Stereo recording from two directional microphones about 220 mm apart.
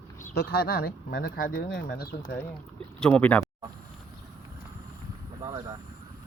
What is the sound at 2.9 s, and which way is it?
Speech, 5° left (ahead or behind).